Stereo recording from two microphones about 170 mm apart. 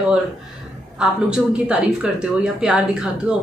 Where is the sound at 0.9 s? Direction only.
5° right (ahead or behind).